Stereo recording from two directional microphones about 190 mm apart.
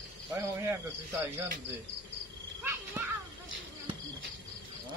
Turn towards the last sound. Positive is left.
turn(degrees=-10)  # may be behind; listen again after turning